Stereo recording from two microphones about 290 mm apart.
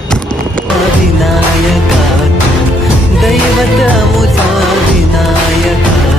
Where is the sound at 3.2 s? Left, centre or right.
Centre.